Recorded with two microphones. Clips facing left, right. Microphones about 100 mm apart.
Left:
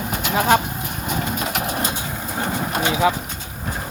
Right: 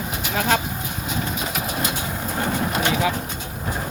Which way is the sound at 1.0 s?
55° left (ahead or behind).